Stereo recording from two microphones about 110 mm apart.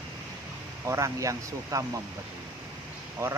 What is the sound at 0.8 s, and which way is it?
Speech, 25° right (ahead or behind).